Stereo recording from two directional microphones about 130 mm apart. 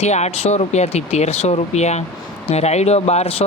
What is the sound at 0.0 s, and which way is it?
Speech, 55° left (ahead or behind).